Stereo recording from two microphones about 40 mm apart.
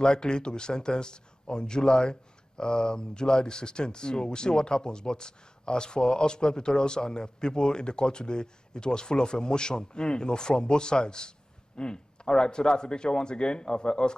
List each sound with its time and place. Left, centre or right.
0.0 s speech: left